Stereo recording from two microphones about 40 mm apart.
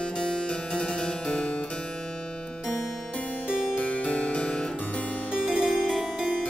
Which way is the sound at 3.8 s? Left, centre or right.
Left.